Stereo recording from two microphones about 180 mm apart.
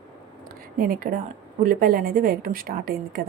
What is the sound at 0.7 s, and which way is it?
A woman's voice, 55° right (ahead or behind).